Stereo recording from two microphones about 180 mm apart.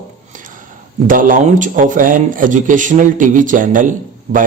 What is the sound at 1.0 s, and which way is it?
Speech, 50° right (ahead or behind).